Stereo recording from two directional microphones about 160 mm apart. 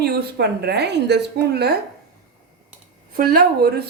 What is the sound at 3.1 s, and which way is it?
Speech, 65° right (ahead or behind).